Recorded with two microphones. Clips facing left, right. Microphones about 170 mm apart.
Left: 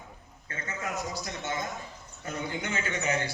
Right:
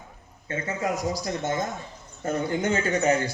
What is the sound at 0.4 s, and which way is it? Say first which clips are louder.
A man's voice: right 9 dB; 30° right (ahead or behind).